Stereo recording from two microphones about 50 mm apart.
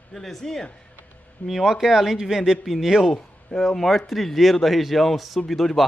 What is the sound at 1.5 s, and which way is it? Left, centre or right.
A man's voice, centre.